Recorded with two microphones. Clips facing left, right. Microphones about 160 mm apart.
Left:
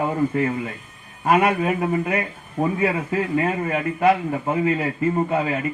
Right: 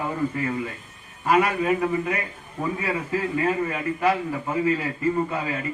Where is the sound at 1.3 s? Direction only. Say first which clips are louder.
Left 2 dB; 30° left (ahead or behind).